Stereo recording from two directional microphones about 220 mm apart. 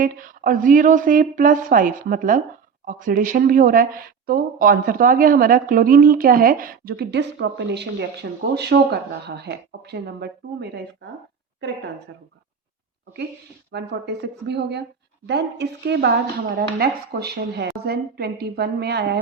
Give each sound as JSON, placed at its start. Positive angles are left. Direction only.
{"t": 0.0, "sound": "speech", "side_deg": -40}
{"t": 12.1, "sound": "speech", "side_deg": -55}
{"t": 13.7, "sound": "speech", "side_deg": -50}